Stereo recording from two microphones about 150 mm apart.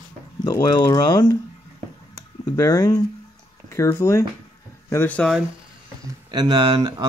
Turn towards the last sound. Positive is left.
turn(degrees=-30)  # may be behind; listen again after turning